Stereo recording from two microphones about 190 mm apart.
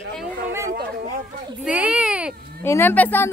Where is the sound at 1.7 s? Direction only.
5° right (ahead or behind).